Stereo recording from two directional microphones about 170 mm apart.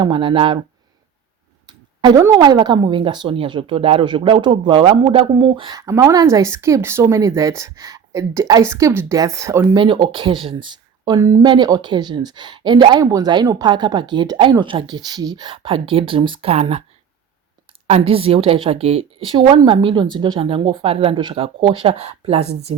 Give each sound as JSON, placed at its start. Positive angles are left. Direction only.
{"t": 0.0, "sound": "a woman's voice", "side_deg": -30}
{"t": 1.6, "sound": "a woman's voice", "side_deg": -25}
{"t": 9.7, "sound": "a woman's voice", "side_deg": -25}
{"t": 11.4, "sound": "a woman's voice", "side_deg": -25}
{"t": 17.8, "sound": "a woman's voice", "side_deg": -35}